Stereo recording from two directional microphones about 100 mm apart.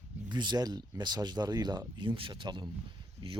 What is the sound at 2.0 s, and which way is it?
Speech, 55° right (ahead or behind).